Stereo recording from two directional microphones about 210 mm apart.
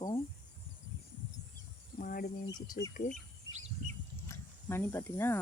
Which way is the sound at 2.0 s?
45° left (ahead or behind).